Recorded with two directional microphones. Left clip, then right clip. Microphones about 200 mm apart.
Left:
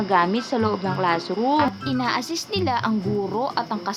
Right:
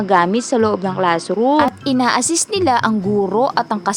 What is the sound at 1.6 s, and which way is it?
A woman's voice, 45° right (ahead or behind).